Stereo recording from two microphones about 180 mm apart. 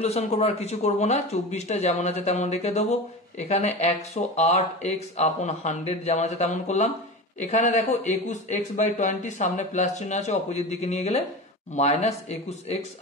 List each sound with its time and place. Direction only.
0.0 s speech: 35° left (ahead or behind)